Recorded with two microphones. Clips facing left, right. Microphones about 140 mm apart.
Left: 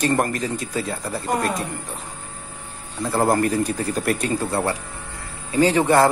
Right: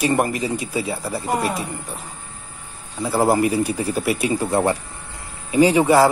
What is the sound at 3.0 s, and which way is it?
A man's voice, 5° right (ahead or behind).